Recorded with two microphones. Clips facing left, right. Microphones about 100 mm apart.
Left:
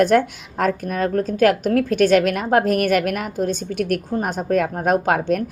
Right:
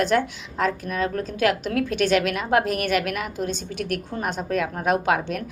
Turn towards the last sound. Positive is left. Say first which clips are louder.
# left 4 dB
turn(degrees=45)  # may be behind; listen again after turning